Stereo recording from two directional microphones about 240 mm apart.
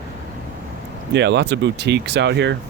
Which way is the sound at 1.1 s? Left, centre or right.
Right.